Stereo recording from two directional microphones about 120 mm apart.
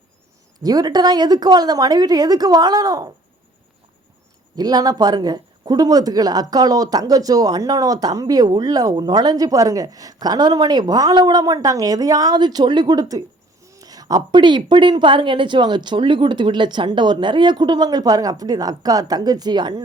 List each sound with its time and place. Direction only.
0.6 s speech: 35° right (ahead or behind)
4.5 s speech: 35° right (ahead or behind)